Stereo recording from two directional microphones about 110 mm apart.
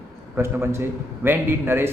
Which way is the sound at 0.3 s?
25° right (ahead or behind).